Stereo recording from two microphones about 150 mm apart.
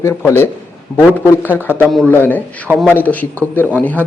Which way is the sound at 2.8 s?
10° left (ahead or behind).